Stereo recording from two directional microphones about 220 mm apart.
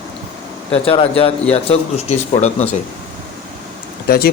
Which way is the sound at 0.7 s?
25° left (ahead or behind).